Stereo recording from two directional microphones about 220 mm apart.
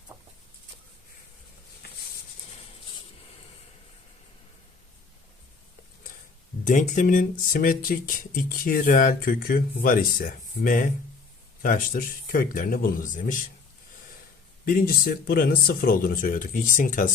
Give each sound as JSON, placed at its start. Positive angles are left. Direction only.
{"t": 6.7, "sound": "speech", "side_deg": 35}
{"t": 14.6, "sound": "speech", "side_deg": 40}